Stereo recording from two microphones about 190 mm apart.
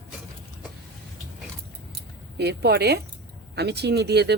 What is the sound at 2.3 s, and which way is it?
Speech, 60° right (ahead or behind).